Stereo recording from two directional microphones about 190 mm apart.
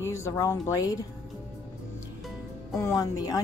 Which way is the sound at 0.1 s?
15° left (ahead or behind).